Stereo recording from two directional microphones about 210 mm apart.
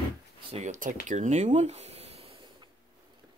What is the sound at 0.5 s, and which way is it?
Speech, 35° right (ahead or behind).